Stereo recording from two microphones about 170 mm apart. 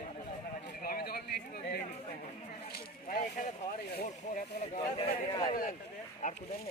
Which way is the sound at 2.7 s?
60° left (ahead or behind).